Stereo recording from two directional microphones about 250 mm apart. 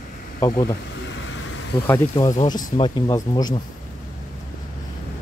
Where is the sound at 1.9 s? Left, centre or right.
Centre.